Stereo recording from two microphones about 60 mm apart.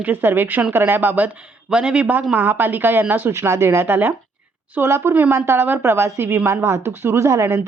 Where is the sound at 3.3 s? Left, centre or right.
Right.